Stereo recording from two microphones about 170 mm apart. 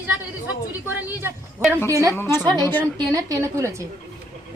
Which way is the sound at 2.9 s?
25° right (ahead or behind).